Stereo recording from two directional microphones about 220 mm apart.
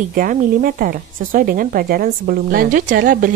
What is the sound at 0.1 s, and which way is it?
Speech, 40° right (ahead or behind).